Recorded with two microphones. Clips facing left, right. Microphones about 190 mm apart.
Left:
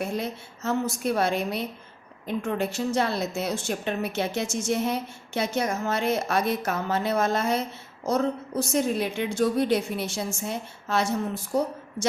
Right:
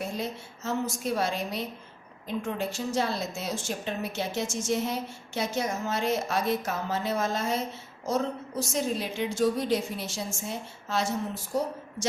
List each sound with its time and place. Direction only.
0.0 s a woman's voice: 60° left (ahead or behind)
8.7 s a woman's voice: 60° left (ahead or behind)